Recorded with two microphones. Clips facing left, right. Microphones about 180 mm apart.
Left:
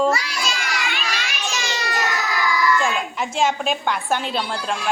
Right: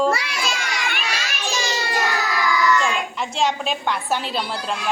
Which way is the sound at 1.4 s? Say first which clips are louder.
Right 3 dB; 30° right (ahead or behind).